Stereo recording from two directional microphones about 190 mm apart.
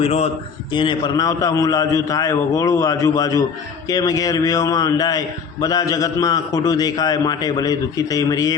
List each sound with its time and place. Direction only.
0.0 s a man's voice: 35° left (ahead or behind); by 8.5 s 20° left (ahead or behind)